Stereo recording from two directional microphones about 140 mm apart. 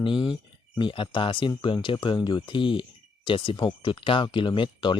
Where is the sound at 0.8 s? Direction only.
35° left (ahead or behind).